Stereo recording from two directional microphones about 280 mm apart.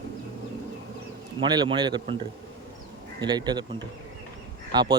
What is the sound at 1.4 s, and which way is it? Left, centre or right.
Speech, centre.